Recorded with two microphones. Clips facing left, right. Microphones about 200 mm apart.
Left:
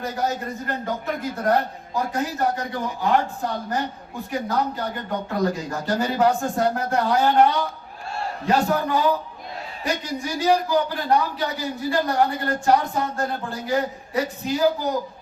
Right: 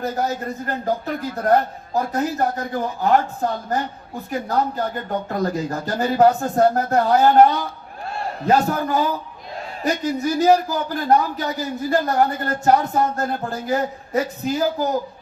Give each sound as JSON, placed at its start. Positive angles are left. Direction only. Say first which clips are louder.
{"t": 0.0, "sound": "a man's voice", "louder": "right 2 dB", "side_deg": -40}